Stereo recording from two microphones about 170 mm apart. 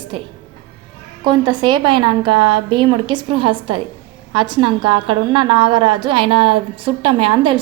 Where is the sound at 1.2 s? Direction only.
25° right (ahead or behind).